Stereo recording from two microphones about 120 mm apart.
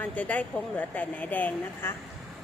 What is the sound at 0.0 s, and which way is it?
A woman's voice, 10° left (ahead or behind).